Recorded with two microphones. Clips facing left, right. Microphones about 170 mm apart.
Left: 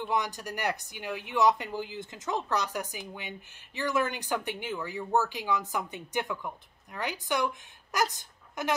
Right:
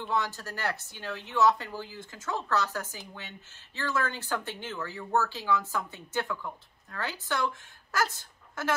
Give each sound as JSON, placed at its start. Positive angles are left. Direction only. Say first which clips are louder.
{"t": 0.0, "sound": "speech", "louder": "left 1 dB", "side_deg": 15}